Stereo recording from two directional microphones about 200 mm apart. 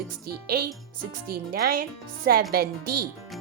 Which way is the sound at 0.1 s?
50° right (ahead or behind).